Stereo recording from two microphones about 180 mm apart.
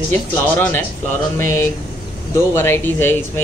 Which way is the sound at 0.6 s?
10° left (ahead or behind).